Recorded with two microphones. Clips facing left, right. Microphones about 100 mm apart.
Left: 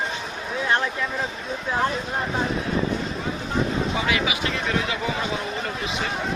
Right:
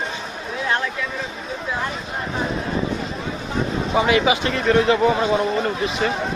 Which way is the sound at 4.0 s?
30° right (ahead or behind).